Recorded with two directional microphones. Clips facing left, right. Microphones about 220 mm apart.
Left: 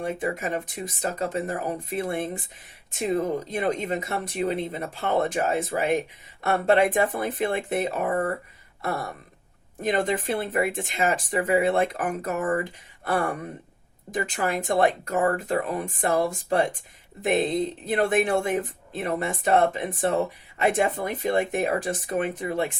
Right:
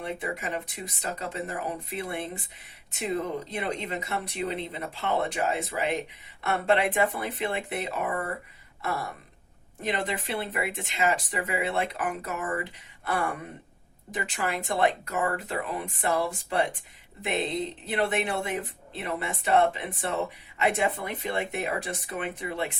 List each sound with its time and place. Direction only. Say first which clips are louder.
0.0 s speech: left 5 dB; 45° left (ahead or behind)
8.8 s a sound: left 3 dB; 45° left (ahead or behind)
9.8 s speech: left 6 dB; 45° left (ahead or behind)